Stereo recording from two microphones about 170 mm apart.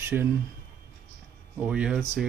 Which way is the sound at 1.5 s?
5° right (ahead or behind).